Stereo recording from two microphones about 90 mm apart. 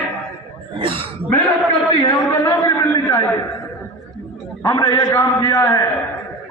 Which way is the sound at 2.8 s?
45° left (ahead or behind).